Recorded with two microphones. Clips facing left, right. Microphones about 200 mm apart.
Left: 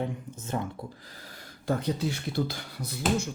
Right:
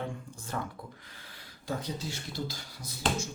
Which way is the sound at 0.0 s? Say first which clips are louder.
Left 5 dB; 20° left (ahead or behind).